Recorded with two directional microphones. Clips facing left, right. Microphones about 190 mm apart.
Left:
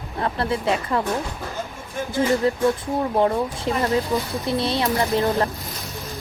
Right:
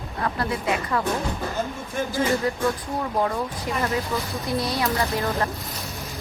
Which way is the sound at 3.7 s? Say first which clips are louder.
Left 5 dB; 25° left (ahead or behind).